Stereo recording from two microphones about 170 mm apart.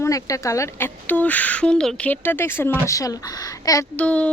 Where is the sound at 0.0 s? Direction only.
20° left (ahead or behind).